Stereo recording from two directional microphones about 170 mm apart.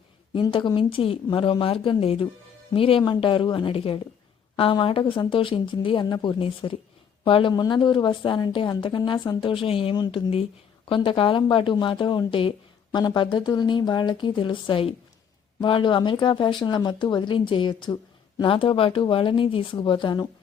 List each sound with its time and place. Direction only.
0.3 s speech: 25° left (ahead or behind)